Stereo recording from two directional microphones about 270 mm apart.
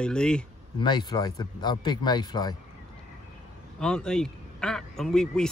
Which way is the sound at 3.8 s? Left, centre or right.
Centre.